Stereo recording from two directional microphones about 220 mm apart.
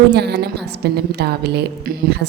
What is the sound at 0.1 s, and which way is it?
A woman's voice, 50° right (ahead or behind).